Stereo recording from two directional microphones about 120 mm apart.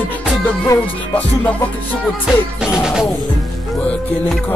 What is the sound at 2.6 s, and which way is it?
Music, 5° right (ahead or behind).